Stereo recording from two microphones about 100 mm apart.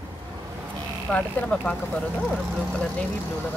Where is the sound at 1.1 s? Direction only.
15° left (ahead or behind).